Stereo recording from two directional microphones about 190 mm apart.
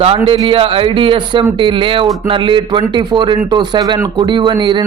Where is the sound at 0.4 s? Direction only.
30° right (ahead or behind).